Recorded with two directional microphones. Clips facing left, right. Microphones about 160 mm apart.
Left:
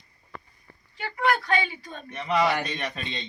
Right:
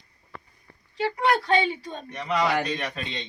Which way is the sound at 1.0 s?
30° right (ahead or behind).